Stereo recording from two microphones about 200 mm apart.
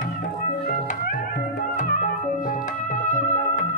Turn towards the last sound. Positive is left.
turn(degrees=40)  # may be behind; listen again after turning